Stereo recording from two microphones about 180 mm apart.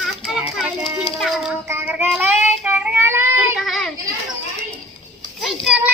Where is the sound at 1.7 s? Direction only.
10° right (ahead or behind).